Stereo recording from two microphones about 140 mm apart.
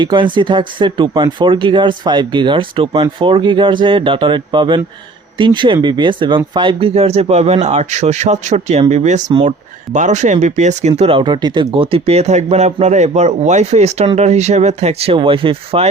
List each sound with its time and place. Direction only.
0.0 s speech: 35° right (ahead or behind)
11.2 s speech: 30° right (ahead or behind)